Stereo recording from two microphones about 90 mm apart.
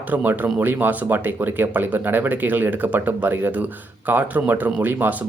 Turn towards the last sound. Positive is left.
turn(degrees=-20)  # may be behind; listen again after turning